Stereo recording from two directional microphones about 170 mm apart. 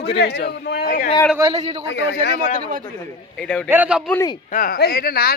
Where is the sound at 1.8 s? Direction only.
90° left.